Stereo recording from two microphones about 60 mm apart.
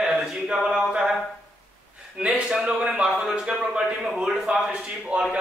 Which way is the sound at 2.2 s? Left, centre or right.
Right.